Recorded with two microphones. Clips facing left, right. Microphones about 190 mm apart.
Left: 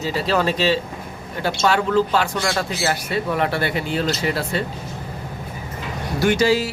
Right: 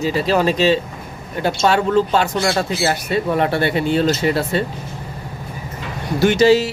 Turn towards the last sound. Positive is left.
turn(degrees=-20)  # may be behind; listen again after turning